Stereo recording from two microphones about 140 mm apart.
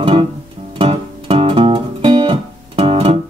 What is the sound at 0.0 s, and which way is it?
Music, 40° right (ahead or behind).